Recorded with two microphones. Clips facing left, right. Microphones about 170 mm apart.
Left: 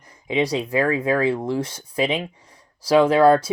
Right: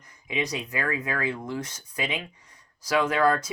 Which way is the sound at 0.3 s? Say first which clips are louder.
Left 9 dB; 30° left (ahead or behind).